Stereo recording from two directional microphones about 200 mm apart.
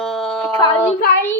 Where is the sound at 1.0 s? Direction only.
45° left (ahead or behind).